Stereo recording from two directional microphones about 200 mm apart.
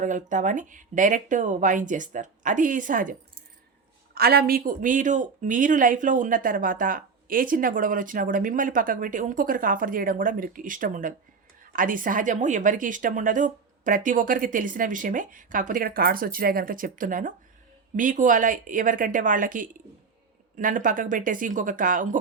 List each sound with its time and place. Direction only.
0.0 s speech: 40° right (ahead or behind)